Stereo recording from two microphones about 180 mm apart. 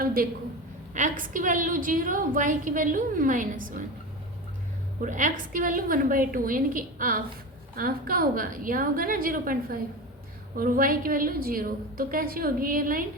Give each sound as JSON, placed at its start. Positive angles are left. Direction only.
{"t": 0.0, "sound": "a sound", "side_deg": -55}
{"t": 0.9, "sound": "a woman's voice", "side_deg": -45}
{"t": 5.0, "sound": "a woman's voice", "side_deg": -45}